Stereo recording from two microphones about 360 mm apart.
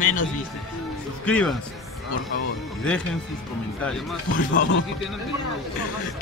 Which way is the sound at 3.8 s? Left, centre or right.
Centre.